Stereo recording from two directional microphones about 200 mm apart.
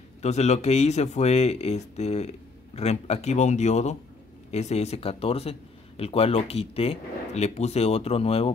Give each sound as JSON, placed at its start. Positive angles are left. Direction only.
{"t": 0.2, "sound": "a man's voice", "side_deg": 35}